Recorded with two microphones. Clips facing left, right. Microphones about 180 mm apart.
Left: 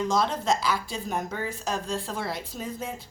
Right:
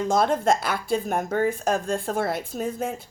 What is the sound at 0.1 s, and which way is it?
A woman's voice, 50° right (ahead or behind).